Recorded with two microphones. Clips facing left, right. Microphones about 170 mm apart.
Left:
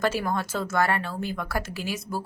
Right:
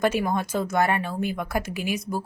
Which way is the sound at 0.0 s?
15° right (ahead or behind).